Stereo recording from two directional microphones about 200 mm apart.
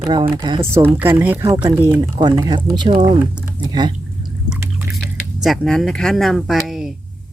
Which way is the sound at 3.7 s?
20° right (ahead or behind).